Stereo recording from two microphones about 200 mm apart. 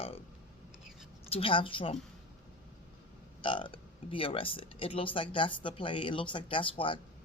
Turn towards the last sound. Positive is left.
turn(degrees=25)  # may be behind; listen again after turning